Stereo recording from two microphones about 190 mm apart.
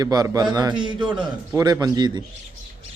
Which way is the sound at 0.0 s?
20° right (ahead or behind).